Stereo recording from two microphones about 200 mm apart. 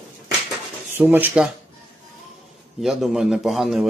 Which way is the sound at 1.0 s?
10° right (ahead or behind).